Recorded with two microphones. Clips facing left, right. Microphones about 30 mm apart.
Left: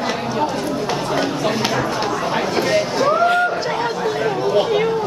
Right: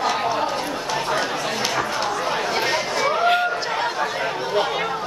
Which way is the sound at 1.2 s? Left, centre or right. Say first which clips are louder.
Left 4 dB; centre.